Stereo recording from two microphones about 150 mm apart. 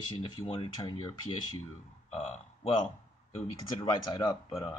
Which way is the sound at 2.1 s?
40° left (ahead or behind).